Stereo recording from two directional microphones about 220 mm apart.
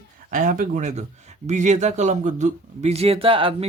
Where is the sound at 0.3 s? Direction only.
35° right (ahead or behind).